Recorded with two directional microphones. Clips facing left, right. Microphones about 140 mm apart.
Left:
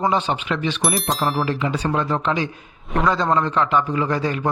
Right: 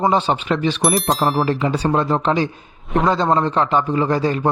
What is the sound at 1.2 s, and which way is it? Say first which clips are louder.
Speech: right 3 dB; 30° right (ahead or behind).